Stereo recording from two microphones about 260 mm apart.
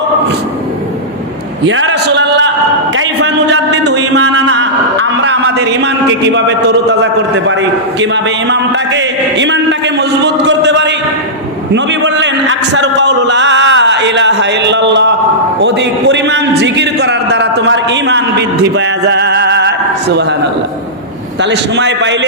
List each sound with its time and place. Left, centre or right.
1.6 s a sound: right
8.1 s a man's voice: right
18.8 s music: right
21.4 s a man's voice: right